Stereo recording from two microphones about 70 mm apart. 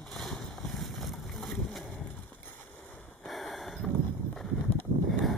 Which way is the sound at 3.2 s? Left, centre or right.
Centre.